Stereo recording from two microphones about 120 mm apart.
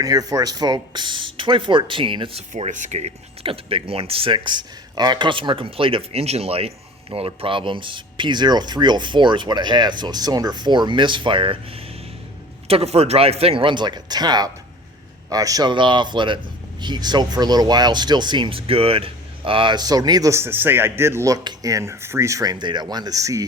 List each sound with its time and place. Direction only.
0.0 s speech: 30° right (ahead or behind); by 2.4 s 45° right (ahead or behind)
2.5 s speech: 90° right; by 11.5 s 45° right (ahead or behind)
12.6 s speech: 55° right (ahead or behind); by 23.5 s 30° right (ahead or behind)